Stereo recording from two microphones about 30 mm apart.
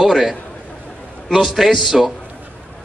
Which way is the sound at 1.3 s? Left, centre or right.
Centre.